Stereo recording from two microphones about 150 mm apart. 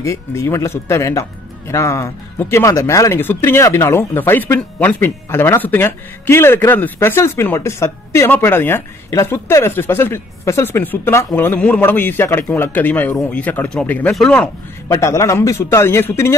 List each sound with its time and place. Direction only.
0.0 s a man's voice: 20° left (ahead or behind)
14.9 s a man's voice: 20° left (ahead or behind)